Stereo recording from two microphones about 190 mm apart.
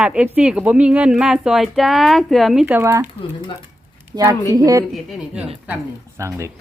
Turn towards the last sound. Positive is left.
turn(degrees=-15)  # may be behind; listen again after turning